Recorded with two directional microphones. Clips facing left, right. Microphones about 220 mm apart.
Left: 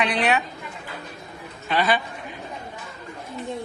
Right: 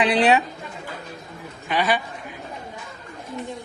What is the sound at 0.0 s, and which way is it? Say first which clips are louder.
Speech: right 4 dB; 30° right (ahead or behind).